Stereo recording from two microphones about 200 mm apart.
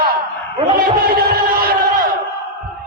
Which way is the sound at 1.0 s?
50° right (ahead or behind).